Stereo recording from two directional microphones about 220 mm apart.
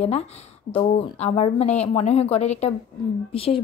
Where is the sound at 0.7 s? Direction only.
25° left (ahead or behind).